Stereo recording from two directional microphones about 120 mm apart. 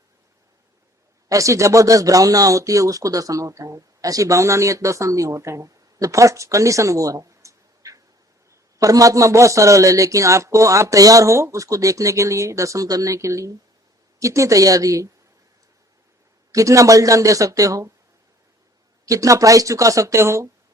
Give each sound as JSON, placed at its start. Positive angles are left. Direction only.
{"t": 1.3, "sound": "speech", "side_deg": -25}
{"t": 16.5, "sound": "speech", "side_deg": -25}
{"t": 19.0, "sound": "speech", "side_deg": -30}